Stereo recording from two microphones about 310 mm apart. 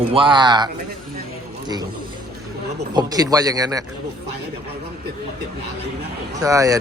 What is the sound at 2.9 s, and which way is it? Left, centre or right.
Speech, centre.